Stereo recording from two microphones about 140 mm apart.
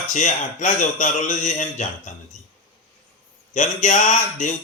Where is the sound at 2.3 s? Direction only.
60° left (ahead or behind).